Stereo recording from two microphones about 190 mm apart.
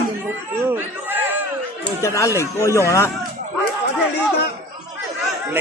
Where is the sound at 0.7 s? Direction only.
10° right (ahead or behind).